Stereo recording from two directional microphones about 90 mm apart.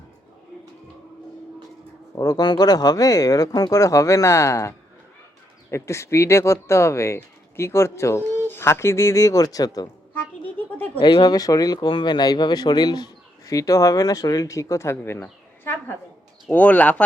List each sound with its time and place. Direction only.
2.1 s speech: 45° left (ahead or behind)
5.7 s speech: 30° left (ahead or behind)
11.0 s speech: 55° left (ahead or behind); by 17.0 s 15° left (ahead or behind)